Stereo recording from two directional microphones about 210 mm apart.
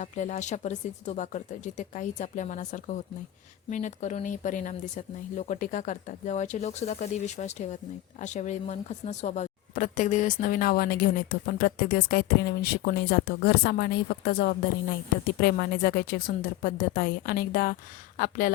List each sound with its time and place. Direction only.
0.0 s speech: 35° left (ahead or behind)